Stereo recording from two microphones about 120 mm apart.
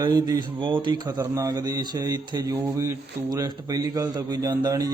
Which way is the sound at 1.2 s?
25° right (ahead or behind).